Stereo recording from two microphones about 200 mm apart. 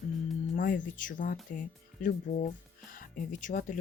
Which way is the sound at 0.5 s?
40° left (ahead or behind).